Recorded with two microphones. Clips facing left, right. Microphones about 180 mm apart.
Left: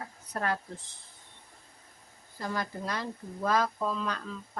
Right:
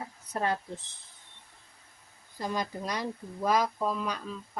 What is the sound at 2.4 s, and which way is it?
Speech, 20° right (ahead or behind).